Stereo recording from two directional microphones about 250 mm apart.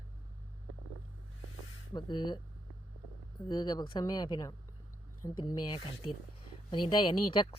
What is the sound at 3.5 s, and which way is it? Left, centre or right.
Speech, centre.